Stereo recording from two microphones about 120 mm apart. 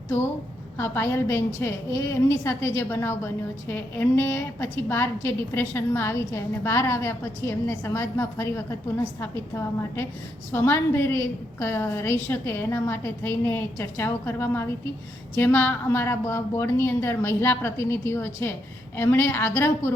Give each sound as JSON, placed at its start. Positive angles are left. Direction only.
{"t": 0.8, "sound": "a woman's voice", "side_deg": 20}